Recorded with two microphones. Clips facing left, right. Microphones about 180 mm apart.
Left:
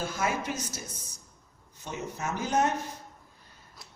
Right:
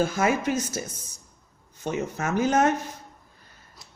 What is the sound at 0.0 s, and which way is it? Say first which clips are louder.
Speech: right 8 dB; 90° right.